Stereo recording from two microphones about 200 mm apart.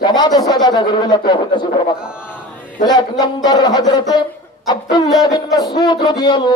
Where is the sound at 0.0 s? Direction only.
20° left (ahead or behind).